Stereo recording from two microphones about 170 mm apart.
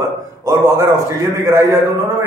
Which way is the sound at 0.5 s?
15° right (ahead or behind).